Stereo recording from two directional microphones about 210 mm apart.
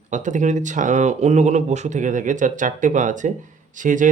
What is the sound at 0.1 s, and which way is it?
Speech, 35° right (ahead or behind).